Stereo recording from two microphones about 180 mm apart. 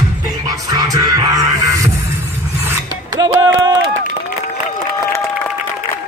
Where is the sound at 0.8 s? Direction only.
20° right (ahead or behind).